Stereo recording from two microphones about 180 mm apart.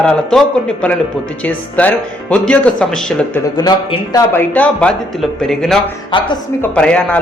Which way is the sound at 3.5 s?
20° left (ahead or behind).